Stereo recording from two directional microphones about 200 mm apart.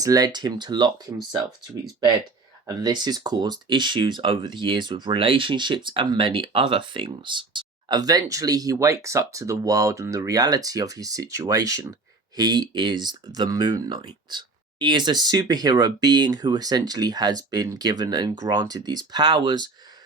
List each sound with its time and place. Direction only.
0.0 s speech: 20° right (ahead or behind)
2.6 s speech: 20° right (ahead or behind)